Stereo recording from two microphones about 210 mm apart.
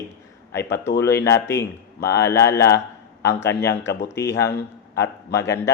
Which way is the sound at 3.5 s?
10° left (ahead or behind).